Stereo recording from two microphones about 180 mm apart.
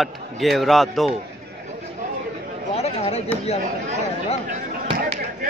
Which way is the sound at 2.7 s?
35° left (ahead or behind).